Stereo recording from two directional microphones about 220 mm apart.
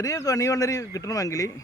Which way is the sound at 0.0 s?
15° left (ahead or behind).